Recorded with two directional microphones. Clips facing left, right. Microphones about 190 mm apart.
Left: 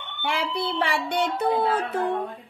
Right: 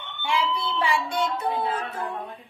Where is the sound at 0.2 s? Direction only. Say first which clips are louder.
Right 1 dB; 65° left (ahead or behind).